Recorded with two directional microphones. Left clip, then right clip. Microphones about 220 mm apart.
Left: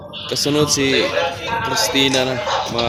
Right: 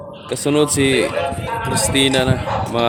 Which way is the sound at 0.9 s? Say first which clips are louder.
Left 1 dB; 50° right (ahead or behind).